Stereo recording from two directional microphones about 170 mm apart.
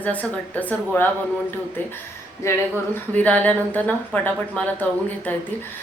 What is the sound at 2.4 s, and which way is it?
Speech, 15° left (ahead or behind).